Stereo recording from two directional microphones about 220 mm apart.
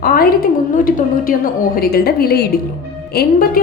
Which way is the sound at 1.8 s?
45° left (ahead or behind).